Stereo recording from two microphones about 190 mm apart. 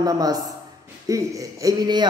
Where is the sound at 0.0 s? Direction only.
20° right (ahead or behind).